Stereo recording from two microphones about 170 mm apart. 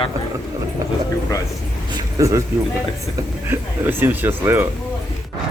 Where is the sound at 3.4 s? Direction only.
10° right (ahead or behind).